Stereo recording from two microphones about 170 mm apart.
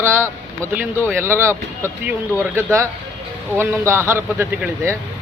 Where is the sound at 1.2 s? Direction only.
15° right (ahead or behind).